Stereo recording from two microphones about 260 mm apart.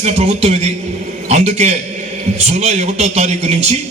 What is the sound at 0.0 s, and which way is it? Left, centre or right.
A man's voice, right.